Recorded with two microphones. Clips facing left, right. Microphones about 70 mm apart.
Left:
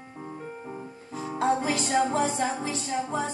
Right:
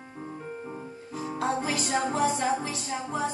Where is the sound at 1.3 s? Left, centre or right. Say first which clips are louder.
Left 4 dB; left.